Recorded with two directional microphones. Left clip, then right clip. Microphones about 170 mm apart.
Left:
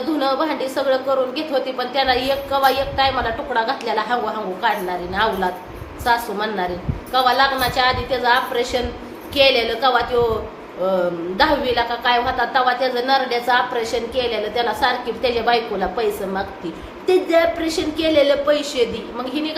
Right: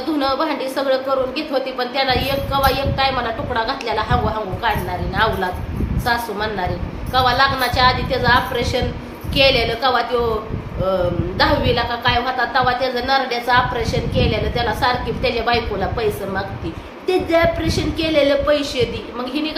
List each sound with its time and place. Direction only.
0.2 s a woman's voice: centre (ahead or behind)
11.3 s a woman's voice: centre (ahead or behind)